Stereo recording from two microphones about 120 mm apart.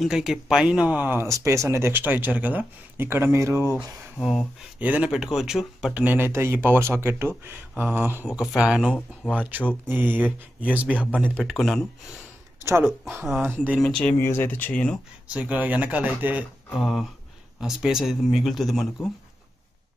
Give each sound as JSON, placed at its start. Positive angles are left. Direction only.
{"t": 0.0, "sound": "speech", "side_deg": -5}
{"t": 3.7, "sound": "speech", "side_deg": 0}
{"t": 5.9, "sound": "speech", "side_deg": -15}
{"t": 8.3, "sound": "speech", "side_deg": -5}
{"t": 8.8, "sound": "speech", "side_deg": 10}
{"t": 9.3, "sound": "speech", "side_deg": -15}
{"t": 11.4, "sound": "speech", "side_deg": 0}
{"t": 13.4, "sound": "speech", "side_deg": -15}
{"t": 13.7, "sound": "speech", "side_deg": 5}
{"t": 14.1, "sound": "speech", "side_deg": 20}
{"t": 15.2, "sound": "speech", "side_deg": -10}
{"t": 16.7, "sound": "speech", "side_deg": 0}